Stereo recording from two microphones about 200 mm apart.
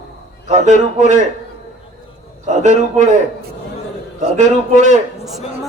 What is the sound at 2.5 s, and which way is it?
Speech, 35° right (ahead or behind).